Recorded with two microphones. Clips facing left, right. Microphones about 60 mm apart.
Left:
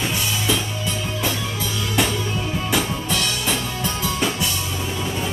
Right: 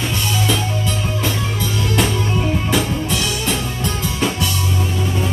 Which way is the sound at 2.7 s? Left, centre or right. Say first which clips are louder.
Right 3 dB; centre.